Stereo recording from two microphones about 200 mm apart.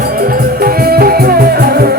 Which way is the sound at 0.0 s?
50° right (ahead or behind).